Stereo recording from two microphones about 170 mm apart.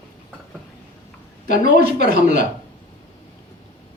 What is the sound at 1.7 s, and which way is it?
Speech, 70° right (ahead or behind).